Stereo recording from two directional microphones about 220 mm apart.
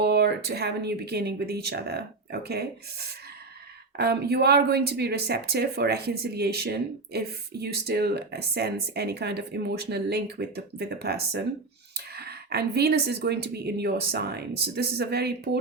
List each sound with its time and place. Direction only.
0.0 s speech: 50° right (ahead or behind)